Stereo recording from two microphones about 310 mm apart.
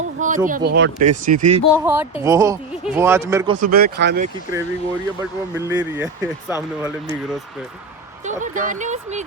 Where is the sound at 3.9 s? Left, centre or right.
Right.